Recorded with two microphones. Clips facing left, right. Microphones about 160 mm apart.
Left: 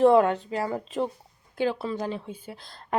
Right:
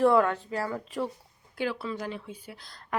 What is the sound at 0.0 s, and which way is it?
A woman's voice, 20° left (ahead or behind).